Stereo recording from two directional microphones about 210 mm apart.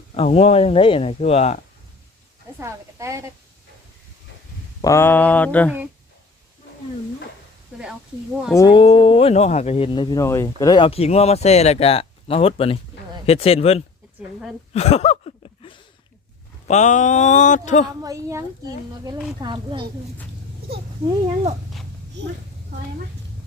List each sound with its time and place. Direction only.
0.1 s speech: 30° left (ahead or behind)
2.6 s a woman's voice: 15° right (ahead or behind)
4.8 s mantra: 15° left (ahead or behind)
8.5 s speech: 20° left (ahead or behind)
14.7 s a sound: 30° left (ahead or behind)
16.6 s speech: 35° left (ahead or behind)
18.0 s a woman's voice: 15° right (ahead or behind)
22.2 s a child's voice: 55° right (ahead or behind)